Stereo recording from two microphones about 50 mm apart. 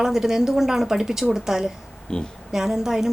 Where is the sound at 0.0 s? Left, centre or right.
Centre.